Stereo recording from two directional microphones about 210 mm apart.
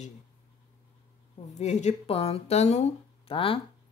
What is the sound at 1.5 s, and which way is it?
Speech, 35° left (ahead or behind).